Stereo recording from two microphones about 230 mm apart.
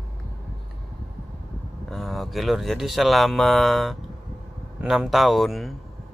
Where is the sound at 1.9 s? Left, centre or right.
Centre.